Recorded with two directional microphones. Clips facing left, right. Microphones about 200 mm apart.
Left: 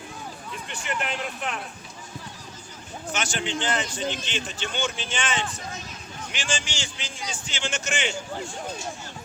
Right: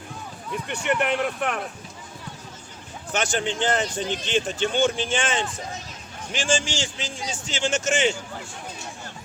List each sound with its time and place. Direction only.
0.7 s speech: 60° right (ahead or behind)
3.1 s speech: 55° right (ahead or behind)